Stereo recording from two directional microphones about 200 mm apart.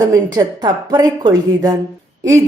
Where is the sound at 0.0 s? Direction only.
15° right (ahead or behind).